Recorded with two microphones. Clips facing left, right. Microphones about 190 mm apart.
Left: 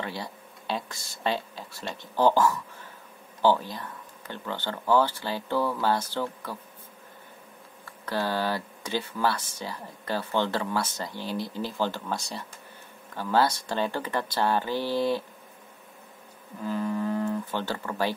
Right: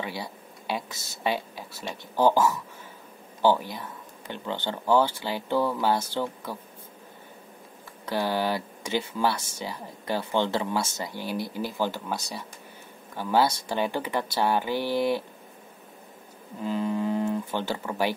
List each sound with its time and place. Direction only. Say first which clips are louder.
0.0 s speech: right 1 dB; 10° right (ahead or behind)
8.0 s speech: right 1 dB; 15° right (ahead or behind)
16.5 s speech: right 1 dB; 20° right (ahead or behind)